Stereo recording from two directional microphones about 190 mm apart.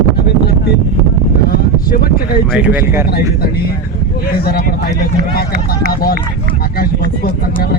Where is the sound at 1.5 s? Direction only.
50° left (ahead or behind).